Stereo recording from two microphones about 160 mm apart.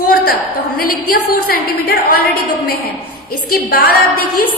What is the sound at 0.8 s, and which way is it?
A woman's voice, 65° left (ahead or behind).